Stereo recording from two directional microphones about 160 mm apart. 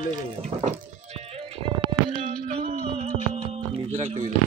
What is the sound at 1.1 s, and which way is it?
Music, 40° right (ahead or behind).